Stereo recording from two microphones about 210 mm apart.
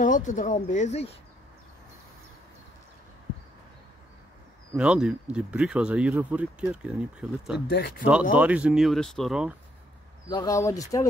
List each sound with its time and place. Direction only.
0.0 s speech: 35° left (ahead or behind)
4.7 s speech: 5° right (ahead or behind)
7.6 s speech: 50° left (ahead or behind)
8.0 s speech: 5° right (ahead or behind)
10.3 s speech: 15° left (ahead or behind)